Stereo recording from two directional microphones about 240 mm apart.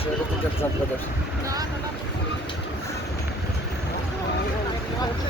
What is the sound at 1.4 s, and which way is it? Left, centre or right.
Speech, centre.